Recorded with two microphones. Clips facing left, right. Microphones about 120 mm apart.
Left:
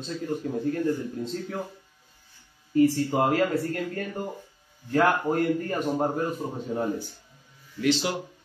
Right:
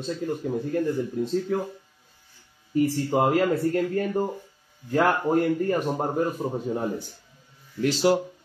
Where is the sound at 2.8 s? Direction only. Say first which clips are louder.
Left 1 dB; 20° right (ahead or behind).